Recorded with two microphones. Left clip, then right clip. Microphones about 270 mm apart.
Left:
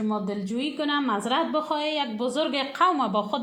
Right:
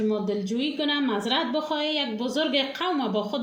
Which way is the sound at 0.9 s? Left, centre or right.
Left.